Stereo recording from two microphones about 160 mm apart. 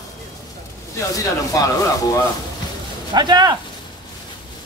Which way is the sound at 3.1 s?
25° right (ahead or behind).